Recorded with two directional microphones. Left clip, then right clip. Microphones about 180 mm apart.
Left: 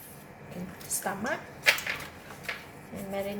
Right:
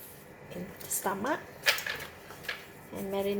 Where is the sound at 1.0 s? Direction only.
35° right (ahead or behind).